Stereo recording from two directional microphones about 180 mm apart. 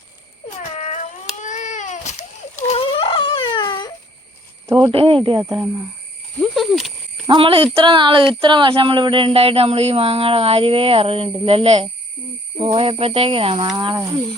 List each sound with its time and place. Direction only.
1.4 s baby cry: 45° left (ahead or behind); by 3.9 s 25° left (ahead or behind)
4.6 s speech: 25° right (ahead or behind)
6.4 s a sound: centre (ahead or behind)
7.3 s speech: 30° right (ahead or behind)